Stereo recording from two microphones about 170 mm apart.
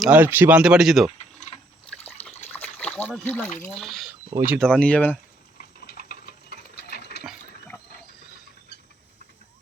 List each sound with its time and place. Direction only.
0.0 s speech: 10° right (ahead or behind)
1.4 s water: 45° left (ahead or behind)
2.5 s splash: 5° left (ahead or behind)
3.2 s speech: 10° left (ahead or behind)
4.3 s speech: 15° right (ahead or behind)
4.6 s speech: 5° left (ahead or behind)
5.5 s sewing machine: 60° left (ahead or behind)